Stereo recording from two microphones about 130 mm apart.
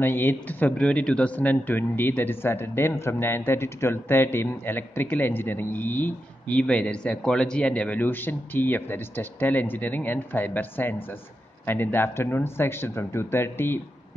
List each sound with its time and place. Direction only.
0.0 s speech: 15° left (ahead or behind)